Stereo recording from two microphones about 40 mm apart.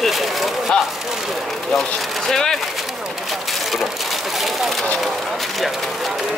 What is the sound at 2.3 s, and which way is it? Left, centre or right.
Speech, centre.